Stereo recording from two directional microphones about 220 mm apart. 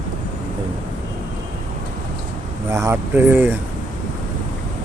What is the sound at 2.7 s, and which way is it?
Speech, 15° right (ahead or behind).